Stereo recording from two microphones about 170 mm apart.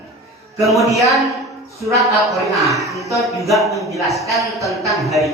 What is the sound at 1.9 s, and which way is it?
A man's voice, centre (ahead or behind).